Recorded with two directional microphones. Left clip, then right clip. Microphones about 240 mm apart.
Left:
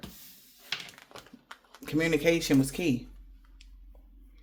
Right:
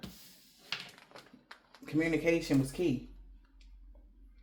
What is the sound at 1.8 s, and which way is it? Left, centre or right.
Speech, left.